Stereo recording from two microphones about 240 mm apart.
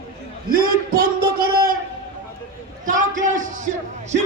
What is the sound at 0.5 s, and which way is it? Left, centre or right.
A man's voice, right.